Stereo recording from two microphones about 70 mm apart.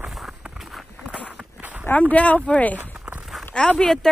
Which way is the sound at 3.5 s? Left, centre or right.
Centre.